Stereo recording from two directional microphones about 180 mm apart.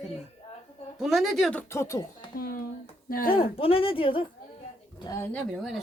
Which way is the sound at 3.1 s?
55° left (ahead or behind).